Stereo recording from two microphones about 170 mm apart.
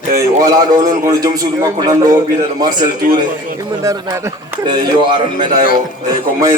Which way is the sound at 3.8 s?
20° right (ahead or behind).